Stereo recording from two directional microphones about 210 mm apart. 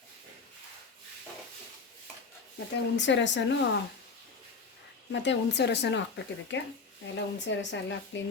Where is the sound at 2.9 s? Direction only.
60° left (ahead or behind).